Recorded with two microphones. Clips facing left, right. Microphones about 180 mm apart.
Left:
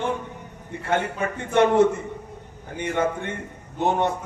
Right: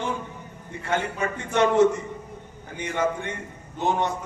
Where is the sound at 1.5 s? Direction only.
55° left (ahead or behind).